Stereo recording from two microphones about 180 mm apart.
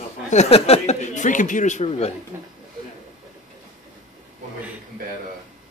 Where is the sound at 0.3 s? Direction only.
35° left (ahead or behind).